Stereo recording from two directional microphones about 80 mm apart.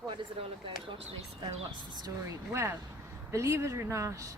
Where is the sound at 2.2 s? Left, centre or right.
Right.